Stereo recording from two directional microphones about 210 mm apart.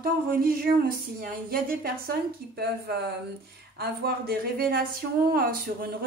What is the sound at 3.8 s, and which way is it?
A woman's voice, 50° right (ahead or behind).